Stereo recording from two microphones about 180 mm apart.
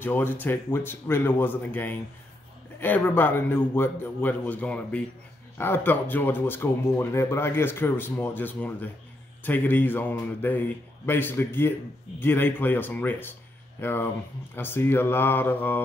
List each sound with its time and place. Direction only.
0.0 s speech: 10° left (ahead or behind)